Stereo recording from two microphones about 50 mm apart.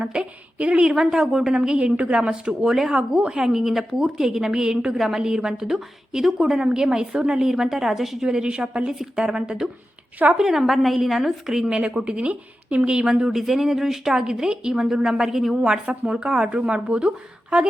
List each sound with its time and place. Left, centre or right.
0.0 s speech: centre
0.9 s a woman's voice: centre
2.6 s a woman's voice: centre
2.9 s a woman's voice: centre
7.4 s a woman's voice: centre
11.9 s a woman's voice: right
15.5 s speech: centre